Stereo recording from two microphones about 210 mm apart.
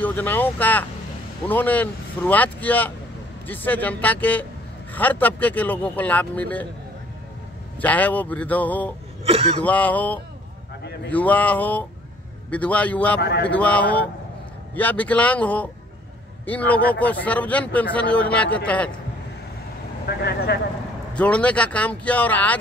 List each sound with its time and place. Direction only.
0.0 s speech: 10° left (ahead or behind)
7.8 s speech: 5° left (ahead or behind)
9.2 s vehicle: 30° right (ahead or behind)
9.6 s speech: 5° left (ahead or behind)
13.2 s speech: 50° left (ahead or behind)
13.5 s speech: 5° left (ahead or behind)
20.1 s speech: 50° left (ahead or behind)
21.1 s speech: 5° left (ahead or behind)